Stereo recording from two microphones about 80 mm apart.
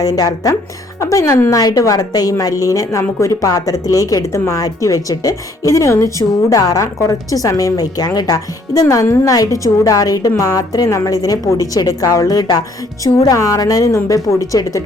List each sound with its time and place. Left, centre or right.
0.0 s speech: left
0.9 s speech: left
13.1 s speech: left